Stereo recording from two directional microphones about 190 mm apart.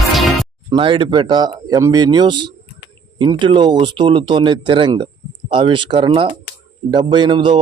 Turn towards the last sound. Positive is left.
turn(degrees=-25)  # may be behind; listen again after turning